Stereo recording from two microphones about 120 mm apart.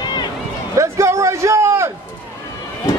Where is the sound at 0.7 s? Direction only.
25° right (ahead or behind).